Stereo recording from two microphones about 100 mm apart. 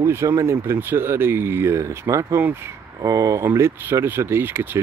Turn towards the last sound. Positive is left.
turn(degrees=-20)  # may be behind; listen again after turning